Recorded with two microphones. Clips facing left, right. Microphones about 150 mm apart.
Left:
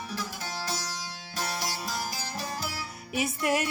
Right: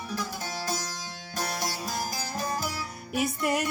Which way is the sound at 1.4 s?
45° right (ahead or behind).